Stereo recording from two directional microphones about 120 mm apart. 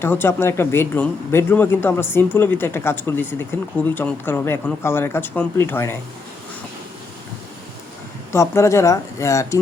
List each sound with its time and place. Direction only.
0.0 s speech: 20° left (ahead or behind)
8.3 s speech: 25° left (ahead or behind)